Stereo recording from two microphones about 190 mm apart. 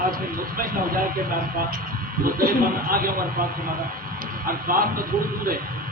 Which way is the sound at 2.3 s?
50° right (ahead or behind).